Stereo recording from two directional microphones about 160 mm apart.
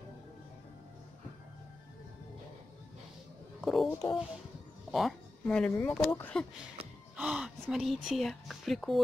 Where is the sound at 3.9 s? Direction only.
20° left (ahead or behind).